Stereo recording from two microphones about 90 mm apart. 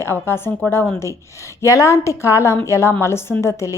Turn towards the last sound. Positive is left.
turn(degrees=30)  # may be behind; listen again after turning